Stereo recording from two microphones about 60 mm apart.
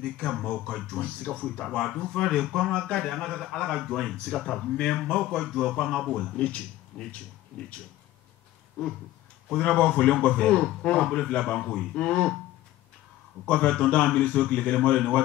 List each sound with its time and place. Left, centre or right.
0.0 s a man's voice: centre
3.0 s a man's voice: centre
9.7 s a man's voice: centre
13.5 s a man's voice: centre